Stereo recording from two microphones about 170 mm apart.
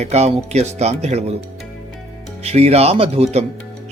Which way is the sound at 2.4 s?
40° right (ahead or behind).